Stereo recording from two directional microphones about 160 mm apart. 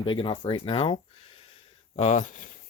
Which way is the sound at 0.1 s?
30° left (ahead or behind).